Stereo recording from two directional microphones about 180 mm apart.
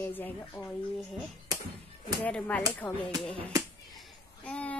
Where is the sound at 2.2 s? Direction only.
5° left (ahead or behind).